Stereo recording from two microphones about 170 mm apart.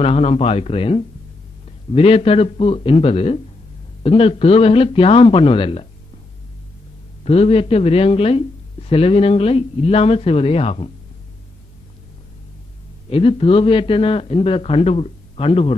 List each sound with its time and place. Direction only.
0.0 s speech: 35° left (ahead or behind)
7.2 s speech: 35° left (ahead or behind)
13.1 s speech: 35° left (ahead or behind)